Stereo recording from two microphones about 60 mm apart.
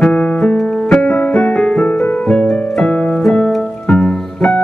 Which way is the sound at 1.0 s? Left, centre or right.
Left.